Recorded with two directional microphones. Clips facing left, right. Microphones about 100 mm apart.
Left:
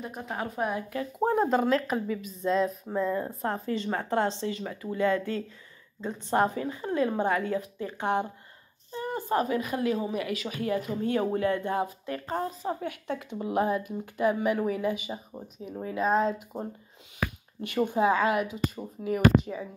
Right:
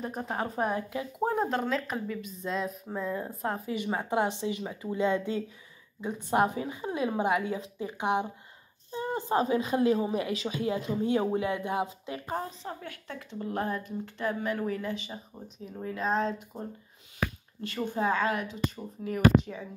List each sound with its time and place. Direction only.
0.0 s a woman's voice: 35° right (ahead or behind)
1.2 s a woman's voice: centre (ahead or behind); by 12.4 s 15° right (ahead or behind)
12.6 s speech: 15° left (ahead or behind)
17.6 s speech: 15° left (ahead or behind)